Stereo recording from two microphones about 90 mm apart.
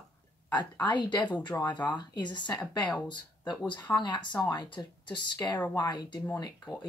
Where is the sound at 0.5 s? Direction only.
55° left (ahead or behind).